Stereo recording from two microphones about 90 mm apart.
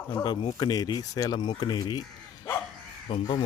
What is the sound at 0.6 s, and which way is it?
Speech, 45° left (ahead or behind).